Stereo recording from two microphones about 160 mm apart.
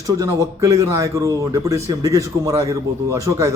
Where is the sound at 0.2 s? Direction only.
20° right (ahead or behind).